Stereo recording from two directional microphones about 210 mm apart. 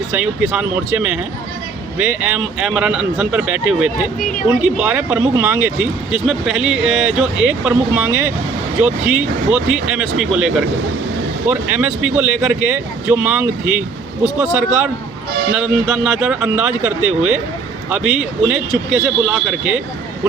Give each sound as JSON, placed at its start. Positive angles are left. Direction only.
{"t": 0.5, "sound": "speech", "side_deg": -5}